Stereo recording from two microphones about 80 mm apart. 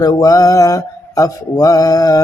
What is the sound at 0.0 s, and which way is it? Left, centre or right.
Mantra, left.